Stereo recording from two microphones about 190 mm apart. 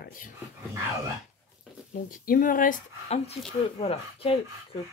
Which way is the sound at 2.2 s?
45° left (ahead or behind).